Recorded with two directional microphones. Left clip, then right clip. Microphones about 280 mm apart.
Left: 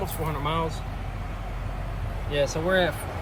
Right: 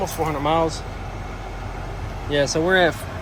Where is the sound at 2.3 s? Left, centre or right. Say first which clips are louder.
Right 5 dB; right.